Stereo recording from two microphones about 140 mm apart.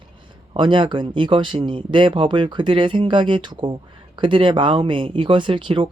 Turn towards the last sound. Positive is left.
turn(degrees=-35)  # may be behind; listen again after turning